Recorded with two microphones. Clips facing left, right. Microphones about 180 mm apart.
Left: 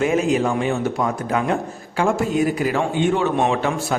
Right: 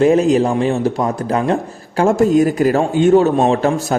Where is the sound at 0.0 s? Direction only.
35° right (ahead or behind).